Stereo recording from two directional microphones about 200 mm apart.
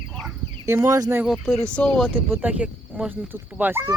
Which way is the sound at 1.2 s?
Centre (ahead or behind).